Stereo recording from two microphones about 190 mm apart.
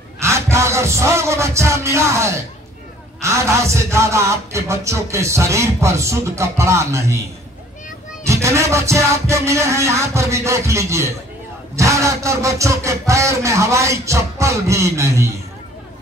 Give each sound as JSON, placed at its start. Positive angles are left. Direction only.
{"t": 0.2, "sound": "a man's voice", "side_deg": -15}
{"t": 8.3, "sound": "a man's voice", "side_deg": -15}